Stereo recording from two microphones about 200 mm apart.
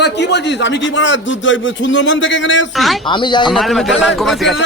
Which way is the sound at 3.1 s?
25° left (ahead or behind).